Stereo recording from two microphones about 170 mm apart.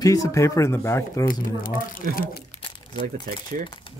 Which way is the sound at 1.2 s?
50° left (ahead or behind).